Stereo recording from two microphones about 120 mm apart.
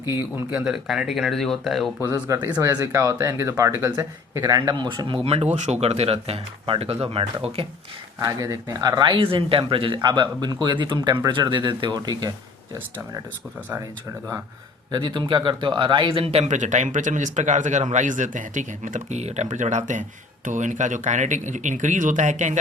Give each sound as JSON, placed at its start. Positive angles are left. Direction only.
{"t": 0.0, "sound": "speech", "side_deg": -20}
{"t": 0.5, "sound": "speech", "side_deg": -5}
{"t": 2.0, "sound": "speech", "side_deg": -25}
{"t": 5.5, "sound": "speech", "side_deg": -70}
{"t": 8.2, "sound": "speech", "side_deg": -30}
{"t": 14.9, "sound": "speech", "side_deg": -40}